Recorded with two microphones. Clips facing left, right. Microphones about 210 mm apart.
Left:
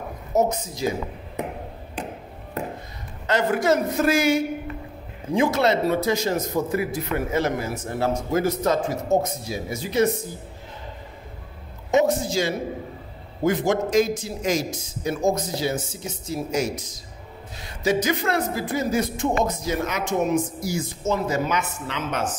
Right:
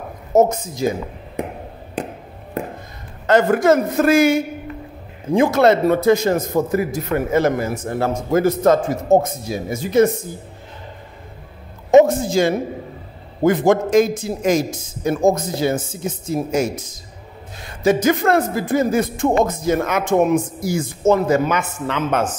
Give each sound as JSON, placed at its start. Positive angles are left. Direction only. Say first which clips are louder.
{"t": 0.3, "sound": "a man's voice", "louder": "right 7 dB", "side_deg": -50}
{"t": 3.3, "sound": "a man's voice", "louder": "right 7 dB", "side_deg": -50}
{"t": 11.9, "sound": "a man's voice", "louder": "right 8 dB", "side_deg": -50}